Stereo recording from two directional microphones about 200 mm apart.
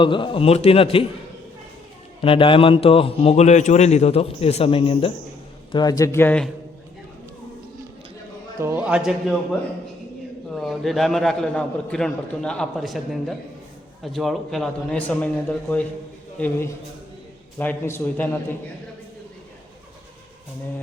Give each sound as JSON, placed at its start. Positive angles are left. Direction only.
{"t": 0.0, "sound": "a man's voice", "side_deg": 25}
{"t": 2.2, "sound": "a man's voice", "side_deg": 25}
{"t": 8.6, "sound": "a man's voice", "side_deg": -10}
{"t": 10.5, "sound": "a man's voice", "side_deg": 0}